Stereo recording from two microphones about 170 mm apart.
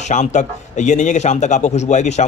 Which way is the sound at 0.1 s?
45° left (ahead or behind).